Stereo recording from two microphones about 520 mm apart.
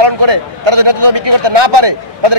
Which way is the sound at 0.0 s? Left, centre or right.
Right.